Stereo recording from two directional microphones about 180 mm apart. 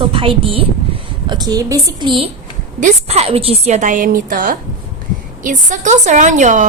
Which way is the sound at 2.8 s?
40° right (ahead or behind).